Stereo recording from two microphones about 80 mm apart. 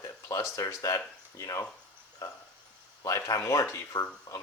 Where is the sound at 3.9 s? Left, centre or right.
Left.